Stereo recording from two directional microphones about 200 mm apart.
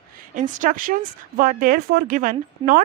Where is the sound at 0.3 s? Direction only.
40° right (ahead or behind).